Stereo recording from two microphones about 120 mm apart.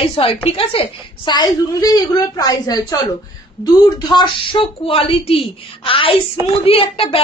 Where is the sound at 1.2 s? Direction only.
35° left (ahead or behind).